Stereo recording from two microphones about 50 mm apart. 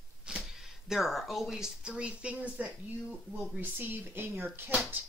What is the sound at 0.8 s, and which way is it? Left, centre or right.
Speech, centre.